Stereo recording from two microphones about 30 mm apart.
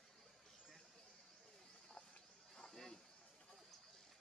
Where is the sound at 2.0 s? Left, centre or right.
Left.